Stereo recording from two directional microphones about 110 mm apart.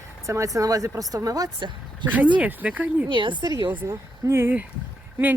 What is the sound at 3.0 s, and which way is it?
Speech, 45° right (ahead or behind).